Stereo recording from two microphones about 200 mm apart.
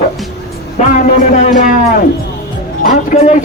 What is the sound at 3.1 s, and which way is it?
Speech, 35° left (ahead or behind).